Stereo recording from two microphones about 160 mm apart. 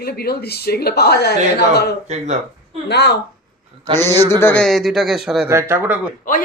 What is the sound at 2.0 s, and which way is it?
Speech, 45° right (ahead or behind).